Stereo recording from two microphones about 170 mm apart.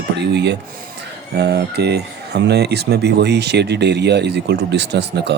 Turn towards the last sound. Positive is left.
turn(degrees=-85)